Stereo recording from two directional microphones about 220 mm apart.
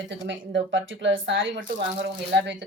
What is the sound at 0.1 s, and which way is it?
Speech, 55° right (ahead or behind).